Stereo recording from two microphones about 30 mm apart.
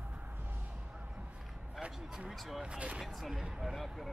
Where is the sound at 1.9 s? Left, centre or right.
Centre.